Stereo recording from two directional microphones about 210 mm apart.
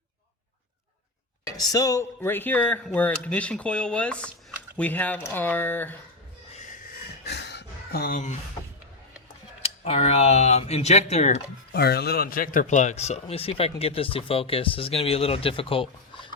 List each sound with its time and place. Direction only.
1.5 s speech: 15° left (ahead or behind)
6.5 s a sound: 40° left (ahead or behind)
9.6 s speech: 30° left (ahead or behind)
11.7 s speech: 50° left (ahead or behind); by 16.3 s 25° left (ahead or behind)